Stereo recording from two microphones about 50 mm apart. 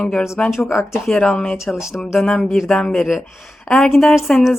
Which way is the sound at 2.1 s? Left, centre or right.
Centre.